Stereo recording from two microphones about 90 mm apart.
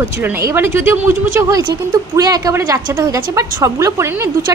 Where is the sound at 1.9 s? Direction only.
50° right (ahead or behind).